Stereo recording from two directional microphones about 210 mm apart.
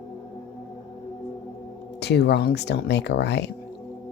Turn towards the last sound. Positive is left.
turn(degrees=55)  # may be behind; listen again after turning